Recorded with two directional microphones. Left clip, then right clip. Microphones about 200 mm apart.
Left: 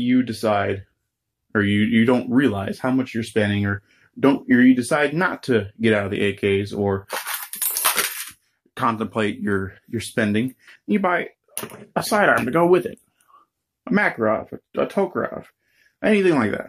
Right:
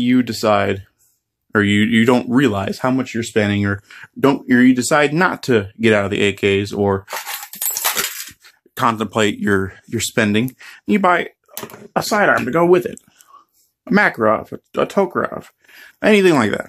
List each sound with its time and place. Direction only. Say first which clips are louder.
0.0 s speech: right 4 dB; 50° right (ahead or behind)
4.2 s speech: right 3 dB; 35° right (ahead or behind)
8.7 s speech: right 5 dB; 35° right (ahead or behind)
11.9 s speech: right 3 dB; 30° right (ahead or behind)